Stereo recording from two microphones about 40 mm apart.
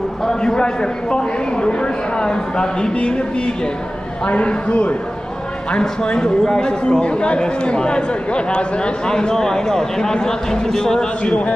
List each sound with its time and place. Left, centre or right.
0.2 s a man's voice: centre
6.9 s speech: left